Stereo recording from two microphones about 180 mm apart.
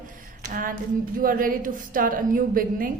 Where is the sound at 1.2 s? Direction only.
50° right (ahead or behind).